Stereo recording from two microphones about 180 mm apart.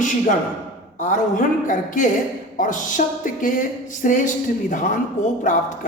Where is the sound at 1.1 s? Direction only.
45° left (ahead or behind).